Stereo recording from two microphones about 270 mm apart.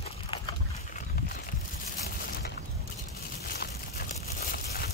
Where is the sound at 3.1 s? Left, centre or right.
Left.